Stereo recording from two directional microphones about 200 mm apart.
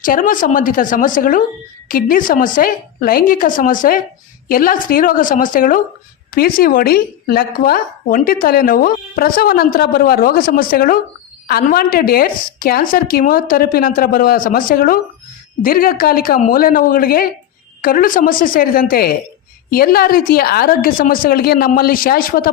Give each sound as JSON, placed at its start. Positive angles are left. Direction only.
{"t": 0.0, "sound": "a woman's voice", "side_deg": 40}